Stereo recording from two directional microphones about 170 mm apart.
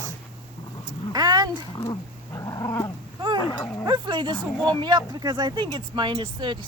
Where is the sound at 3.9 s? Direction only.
25° right (ahead or behind).